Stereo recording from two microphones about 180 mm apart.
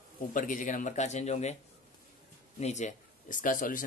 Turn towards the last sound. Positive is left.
turn(degrees=50)  # may be behind; listen again after turning